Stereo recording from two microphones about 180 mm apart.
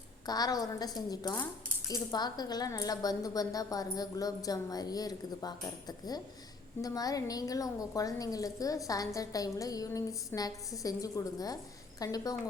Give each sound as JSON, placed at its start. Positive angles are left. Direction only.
{"t": 0.3, "sound": "a woman's voice", "side_deg": 20}
{"t": 6.8, "sound": "a woman's voice", "side_deg": 20}